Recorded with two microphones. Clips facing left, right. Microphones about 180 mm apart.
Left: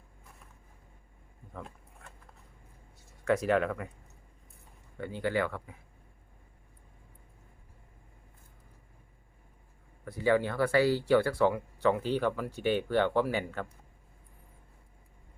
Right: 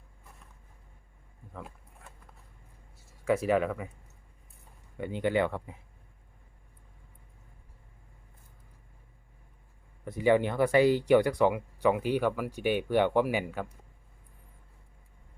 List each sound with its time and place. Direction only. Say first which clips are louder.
1.5 s a sound: even; 5° right (ahead or behind)
3.0 s speech: right 1 dB; 5° right (ahead or behind)
4.9 s speech: right 3 dB; 20° right (ahead or behind)
10.0 s speech: right 2 dB; 20° right (ahead or behind)